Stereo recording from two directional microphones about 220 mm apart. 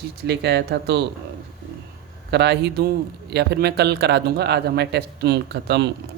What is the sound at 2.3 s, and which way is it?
Speech, 50° right (ahead or behind).